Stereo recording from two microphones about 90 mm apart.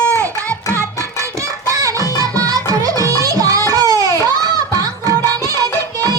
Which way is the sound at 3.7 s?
40° right (ahead or behind).